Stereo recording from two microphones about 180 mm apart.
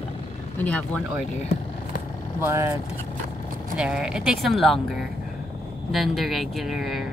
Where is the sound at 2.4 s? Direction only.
15° right (ahead or behind).